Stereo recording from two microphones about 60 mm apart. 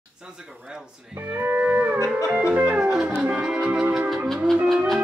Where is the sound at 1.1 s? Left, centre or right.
Right; by 3.5 s centre.